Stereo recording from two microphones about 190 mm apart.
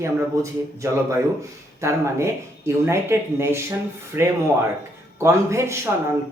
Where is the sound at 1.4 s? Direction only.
15° right (ahead or behind).